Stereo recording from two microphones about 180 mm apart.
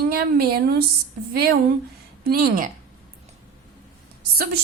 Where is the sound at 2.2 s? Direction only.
55° right (ahead or behind).